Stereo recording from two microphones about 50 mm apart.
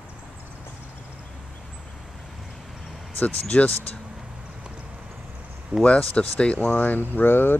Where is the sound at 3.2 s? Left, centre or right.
Left.